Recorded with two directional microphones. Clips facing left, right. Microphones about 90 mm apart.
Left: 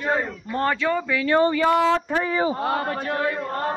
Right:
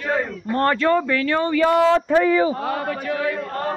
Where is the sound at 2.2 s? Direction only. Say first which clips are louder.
Right 5 dB; 20° left (ahead or behind).